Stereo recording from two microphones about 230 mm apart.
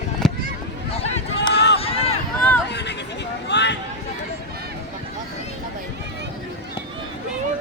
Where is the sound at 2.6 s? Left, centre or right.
Left.